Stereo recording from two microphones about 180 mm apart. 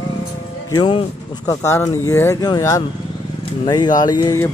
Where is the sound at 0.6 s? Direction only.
25° left (ahead or behind).